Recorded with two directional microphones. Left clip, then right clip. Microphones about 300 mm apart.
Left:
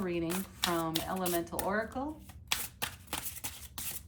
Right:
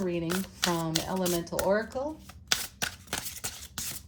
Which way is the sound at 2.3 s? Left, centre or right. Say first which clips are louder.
Right 6 dB; right.